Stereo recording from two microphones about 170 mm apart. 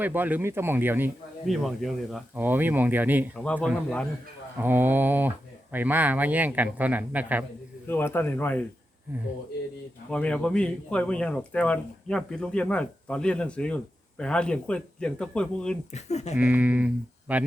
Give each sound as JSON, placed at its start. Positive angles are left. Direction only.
{"t": 0.0, "sound": "speech", "side_deg": -10}
{"t": 1.5, "sound": "speech", "side_deg": 0}
{"t": 2.3, "sound": "speech", "side_deg": -10}
{"t": 3.3, "sound": "speech", "side_deg": 5}
{"t": 4.5, "sound": "speech", "side_deg": -10}
{"t": 7.9, "sound": "speech", "side_deg": 10}
{"t": 10.1, "sound": "speech", "side_deg": 5}
{"t": 15.9, "sound": "speech", "side_deg": 40}
{"t": 16.4, "sound": "speech", "side_deg": -10}